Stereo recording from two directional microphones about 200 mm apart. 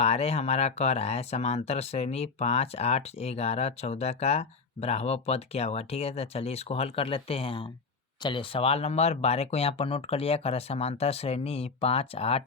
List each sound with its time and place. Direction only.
0.0 s speech: 30° left (ahead or behind)